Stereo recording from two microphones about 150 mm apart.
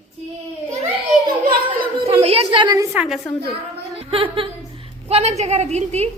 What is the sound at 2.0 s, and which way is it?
Speech, 40° right (ahead or behind).